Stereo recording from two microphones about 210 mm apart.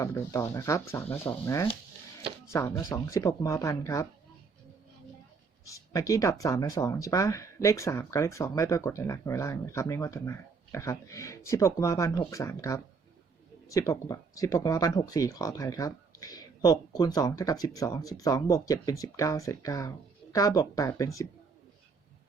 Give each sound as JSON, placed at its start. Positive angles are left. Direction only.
{"t": 0.0, "sound": "speech", "side_deg": 15}
{"t": 5.6, "sound": "speech", "side_deg": 15}